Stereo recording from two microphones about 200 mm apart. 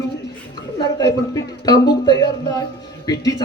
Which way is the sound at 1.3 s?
20° left (ahead or behind).